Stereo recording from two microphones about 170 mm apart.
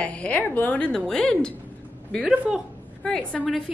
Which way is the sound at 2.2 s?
5° right (ahead or behind).